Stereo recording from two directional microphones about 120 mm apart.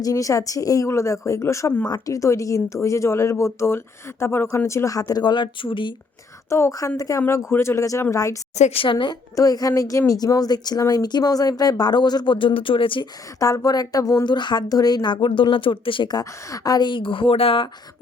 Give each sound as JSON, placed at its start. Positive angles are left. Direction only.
{"t": 0.0, "sound": "speech", "side_deg": 30}
{"t": 6.5, "sound": "speech", "side_deg": 25}
{"t": 8.5, "sound": "a woman's voice", "side_deg": 70}
{"t": 8.8, "sound": "a woman's voice", "side_deg": 45}
{"t": 9.3, "sound": "speech", "side_deg": 30}
{"t": 13.4, "sound": "speech", "side_deg": 30}